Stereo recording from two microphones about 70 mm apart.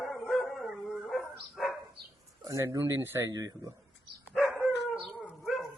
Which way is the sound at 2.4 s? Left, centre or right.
Right.